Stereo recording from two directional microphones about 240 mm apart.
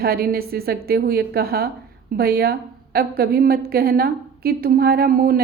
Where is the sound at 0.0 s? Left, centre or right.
Right.